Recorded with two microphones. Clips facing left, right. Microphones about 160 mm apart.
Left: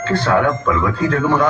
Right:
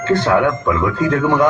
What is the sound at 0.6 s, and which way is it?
Speech, 20° right (ahead or behind).